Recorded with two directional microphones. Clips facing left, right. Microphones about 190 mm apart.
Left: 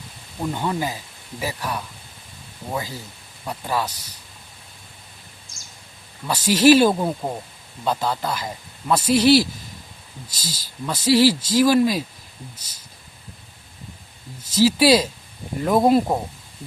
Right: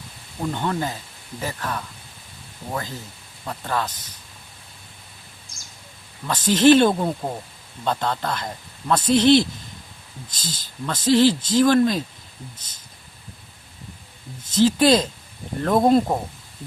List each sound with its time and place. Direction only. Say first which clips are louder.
0.5 s speech: left 1 dB; 10° left (ahead or behind)
3.4 s speech: left 1 dB; 10° left (ahead or behind)
6.2 s speech: even; 10° left (ahead or behind)
14.5 s speech: even; 10° left (ahead or behind)